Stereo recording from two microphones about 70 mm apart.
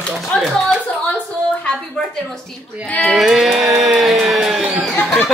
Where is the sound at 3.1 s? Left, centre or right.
Centre.